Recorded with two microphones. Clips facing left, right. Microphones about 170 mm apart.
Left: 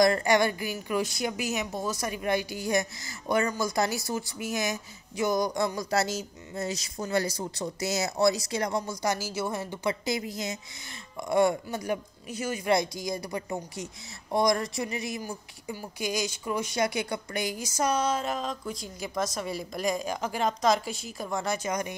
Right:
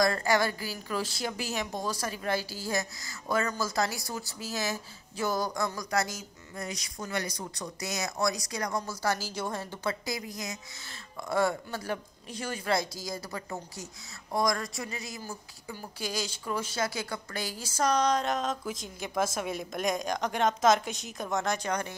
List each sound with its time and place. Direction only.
0.0 s a woman's voice: 20° left (ahead or behind)
1.5 s a woman's voice: 5° left (ahead or behind); by 8.8 s 25° left (ahead or behind)
9.0 s a woman's voice: 10° left (ahead or behind)